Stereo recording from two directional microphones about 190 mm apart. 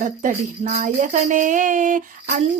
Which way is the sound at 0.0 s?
45° right (ahead or behind).